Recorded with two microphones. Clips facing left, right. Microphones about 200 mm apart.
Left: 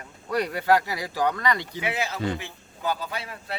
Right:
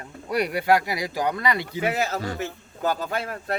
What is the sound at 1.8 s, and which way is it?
A man's voice, 40° right (ahead or behind).